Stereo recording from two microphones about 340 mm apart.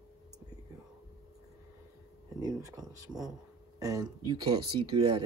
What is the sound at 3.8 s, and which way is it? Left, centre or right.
Speech, centre.